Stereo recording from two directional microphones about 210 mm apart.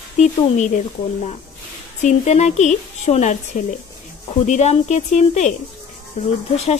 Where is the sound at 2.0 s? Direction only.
35° left (ahead or behind).